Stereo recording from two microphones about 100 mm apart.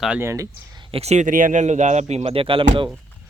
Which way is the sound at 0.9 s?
90° right.